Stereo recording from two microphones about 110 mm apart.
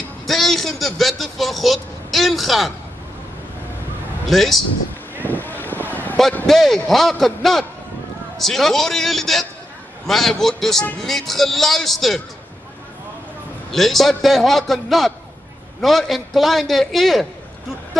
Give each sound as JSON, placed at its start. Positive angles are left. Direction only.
{"t": 0.3, "sound": "speech", "side_deg": 0}
{"t": 4.3, "sound": "speech", "side_deg": 0}
{"t": 5.1, "sound": "vehicle", "side_deg": 15}
{"t": 6.4, "sound": "speech", "side_deg": 0}
{"t": 13.7, "sound": "speech", "side_deg": 0}